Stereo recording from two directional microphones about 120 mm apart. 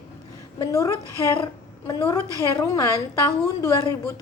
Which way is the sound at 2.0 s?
20° left (ahead or behind).